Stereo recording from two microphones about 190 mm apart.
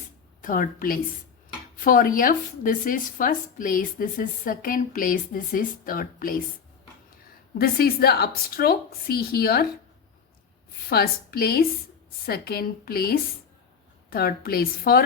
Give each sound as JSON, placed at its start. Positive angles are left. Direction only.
{"t": 0.4, "sound": "a woman's voice", "side_deg": 45}
{"t": 7.6, "sound": "a woman's voice", "side_deg": 55}
{"t": 10.8, "sound": "a woman's voice", "side_deg": 50}